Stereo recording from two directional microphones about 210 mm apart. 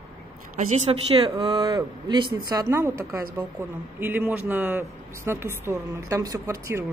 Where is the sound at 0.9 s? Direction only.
25° right (ahead or behind).